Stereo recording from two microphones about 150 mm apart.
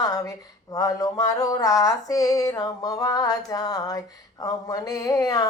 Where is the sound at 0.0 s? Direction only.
25° left (ahead or behind).